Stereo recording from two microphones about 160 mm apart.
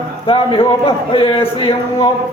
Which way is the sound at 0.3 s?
35° left (ahead or behind).